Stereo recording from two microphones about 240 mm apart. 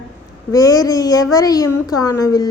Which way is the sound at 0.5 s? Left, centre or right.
Centre.